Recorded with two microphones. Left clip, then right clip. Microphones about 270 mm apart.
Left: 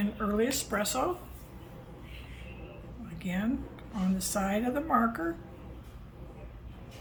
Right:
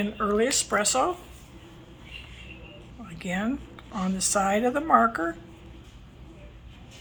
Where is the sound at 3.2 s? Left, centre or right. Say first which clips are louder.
Right 4 dB; centre.